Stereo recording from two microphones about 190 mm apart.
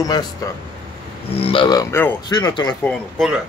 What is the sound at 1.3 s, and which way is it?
Speech, 30° left (ahead or behind).